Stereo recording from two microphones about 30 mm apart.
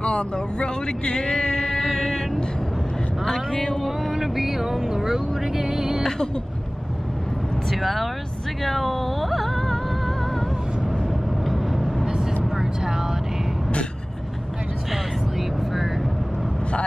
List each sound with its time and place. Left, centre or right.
0.0 s speech: left
0.7 s speech: left
1.3 s music: left
3.4 s speech: centre
3.7 s speech: centre
4.1 s speech: centre
5.3 s vehicle: centre
6.0 s vehicle: left
7.7 s speech: centre
8.6 s music: centre
11.4 s vehicle: centre
12.4 s vehicle: centre
14.9 s vehicle: centre